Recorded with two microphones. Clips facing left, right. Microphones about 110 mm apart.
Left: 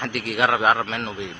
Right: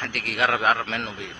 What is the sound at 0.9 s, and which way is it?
Speech, centre (ahead or behind).